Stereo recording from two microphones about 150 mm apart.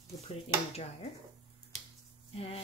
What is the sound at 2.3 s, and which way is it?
Speech, 40° left (ahead or behind).